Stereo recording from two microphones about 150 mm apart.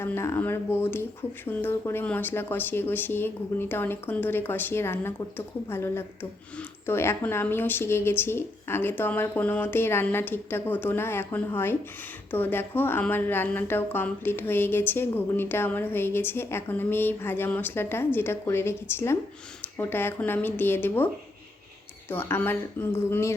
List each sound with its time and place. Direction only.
0.0 s a woman's voice: 15° left (ahead or behind)
22.1 s a woman's voice: 15° left (ahead or behind)